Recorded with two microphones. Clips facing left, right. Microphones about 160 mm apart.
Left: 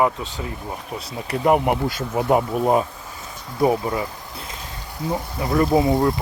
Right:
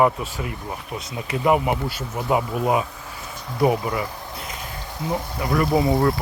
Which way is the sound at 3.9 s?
30° left (ahead or behind).